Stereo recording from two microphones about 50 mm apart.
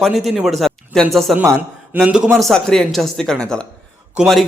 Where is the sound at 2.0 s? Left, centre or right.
Right.